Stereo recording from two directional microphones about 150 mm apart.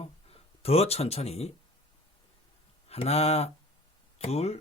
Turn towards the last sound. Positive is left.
turn(degrees=45)  # may be behind; listen again after turning